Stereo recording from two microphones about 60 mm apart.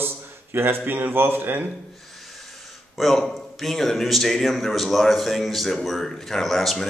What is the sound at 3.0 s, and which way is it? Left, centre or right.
Speech, centre.